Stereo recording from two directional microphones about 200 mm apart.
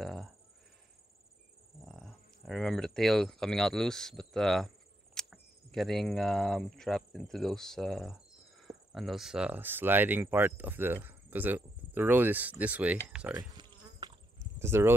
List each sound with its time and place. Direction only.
0.0 s a sound: centre (ahead or behind)
1.9 s speech: centre (ahead or behind)
13.4 s insect: 20° right (ahead or behind)